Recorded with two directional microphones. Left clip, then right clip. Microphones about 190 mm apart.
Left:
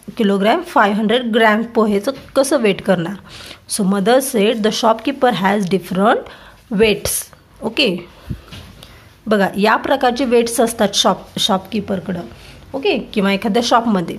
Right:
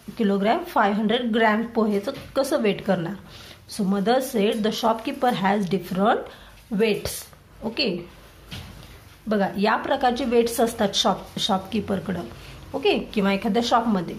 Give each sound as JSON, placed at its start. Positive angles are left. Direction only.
{"t": 0.1, "sound": "a woman's voice", "side_deg": 35}
{"t": 9.3, "sound": "a woman's voice", "side_deg": 40}
{"t": 11.9, "sound": "a woman's voice", "side_deg": 20}